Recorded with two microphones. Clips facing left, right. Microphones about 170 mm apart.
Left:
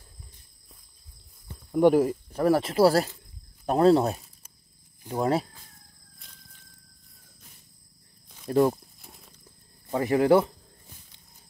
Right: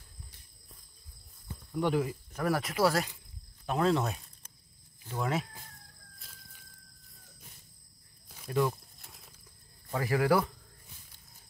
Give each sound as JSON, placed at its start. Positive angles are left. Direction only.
{"t": 1.7, "sound": "speech", "side_deg": 45}
{"t": 2.3, "sound": "speech", "side_deg": 30}
{"t": 8.5, "sound": "speech", "side_deg": 40}
{"t": 9.0, "sound": "horse", "side_deg": 0}
{"t": 9.8, "sound": "speech", "side_deg": 25}